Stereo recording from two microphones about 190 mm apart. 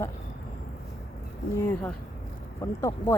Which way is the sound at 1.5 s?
10° left (ahead or behind).